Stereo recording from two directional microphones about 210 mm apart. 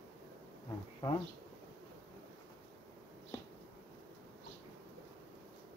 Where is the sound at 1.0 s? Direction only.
20° left (ahead or behind).